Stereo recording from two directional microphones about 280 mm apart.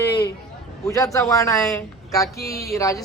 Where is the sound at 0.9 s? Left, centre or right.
Centre.